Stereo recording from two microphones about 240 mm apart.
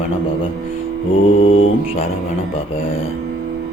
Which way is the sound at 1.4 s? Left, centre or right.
Left.